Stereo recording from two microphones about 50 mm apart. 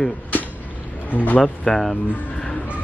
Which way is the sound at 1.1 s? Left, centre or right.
Left.